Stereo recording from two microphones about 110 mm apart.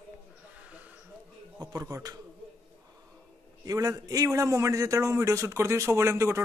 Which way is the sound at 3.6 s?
30° right (ahead or behind).